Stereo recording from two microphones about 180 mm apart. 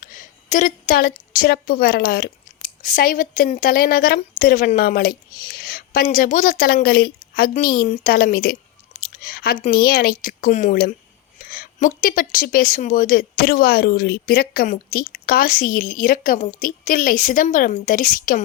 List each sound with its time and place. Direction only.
0.0 s a woman's voice: 50° left (ahead or behind)